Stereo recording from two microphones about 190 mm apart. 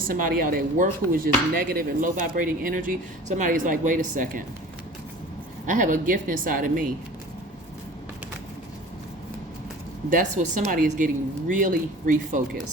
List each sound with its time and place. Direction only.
0.1 s speech: 45° right (ahead or behind)
5.6 s speech: 45° right (ahead or behind)
10.1 s speech: 40° right (ahead or behind)